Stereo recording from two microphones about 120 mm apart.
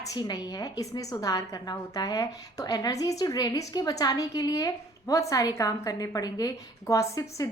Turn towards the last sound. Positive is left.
turn(degrees=25)  # may be behind; listen again after turning